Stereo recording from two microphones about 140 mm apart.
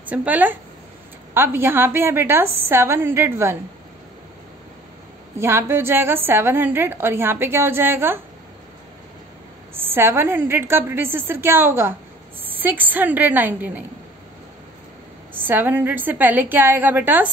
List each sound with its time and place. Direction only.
0.0 s a woman's voice: 10° right (ahead or behind)
5.4 s a woman's voice: 20° right (ahead or behind)
9.8 s a woman's voice: 15° right (ahead or behind)
15.3 s a woman's voice: 15° right (ahead or behind)